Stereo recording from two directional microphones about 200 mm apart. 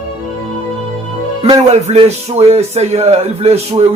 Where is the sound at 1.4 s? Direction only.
35° right (ahead or behind).